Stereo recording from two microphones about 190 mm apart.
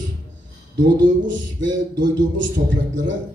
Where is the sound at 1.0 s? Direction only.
75° right (ahead or behind).